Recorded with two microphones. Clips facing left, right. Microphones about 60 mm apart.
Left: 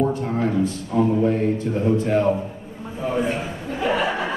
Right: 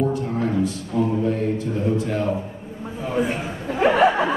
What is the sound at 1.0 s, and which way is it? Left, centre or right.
A man's voice, left.